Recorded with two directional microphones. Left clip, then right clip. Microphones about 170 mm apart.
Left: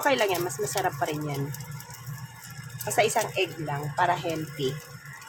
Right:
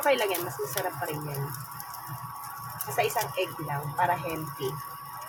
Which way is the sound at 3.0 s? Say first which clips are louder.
Left 4 dB; 35° left (ahead or behind).